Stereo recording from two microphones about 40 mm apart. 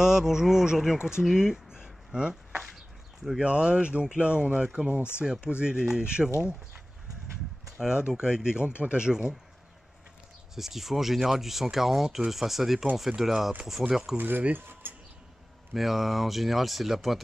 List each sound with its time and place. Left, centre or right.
0.0 s speech: centre
1.2 s a sound: centre
3.4 s speech: right
7.7 s speech: right
10.5 s speech: centre
14.1 s speech: right
14.7 s a sound: right
15.7 s speech: centre